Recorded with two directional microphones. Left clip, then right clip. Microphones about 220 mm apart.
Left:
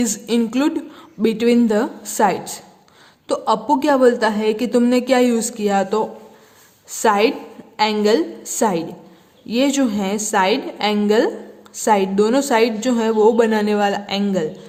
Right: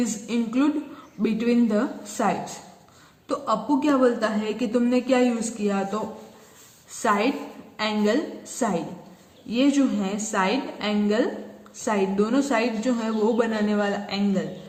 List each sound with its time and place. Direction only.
0.0 s a woman's voice: 50° left (ahead or behind)
7.0 s a woman's voice: 50° left (ahead or behind)